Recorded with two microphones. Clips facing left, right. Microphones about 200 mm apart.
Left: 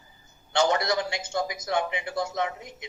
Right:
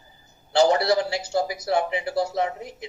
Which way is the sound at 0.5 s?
35° right (ahead or behind).